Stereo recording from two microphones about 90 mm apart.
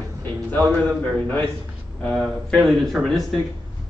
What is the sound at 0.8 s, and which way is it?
A man's voice, 10° left (ahead or behind).